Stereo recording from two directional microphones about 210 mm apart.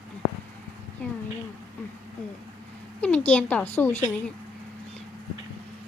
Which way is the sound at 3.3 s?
5° left (ahead or behind).